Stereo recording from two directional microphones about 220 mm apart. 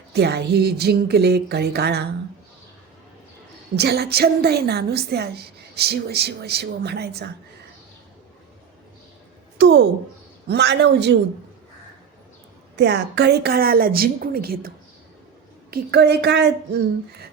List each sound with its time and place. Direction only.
0.1 s a woman's voice: 50° right (ahead or behind)
3.8 s a woman's voice: 45° right (ahead or behind)
9.6 s a woman's voice: 50° right (ahead or behind)
12.7 s a woman's voice: 50° right (ahead or behind)
15.7 s a woman's voice: 45° right (ahead or behind)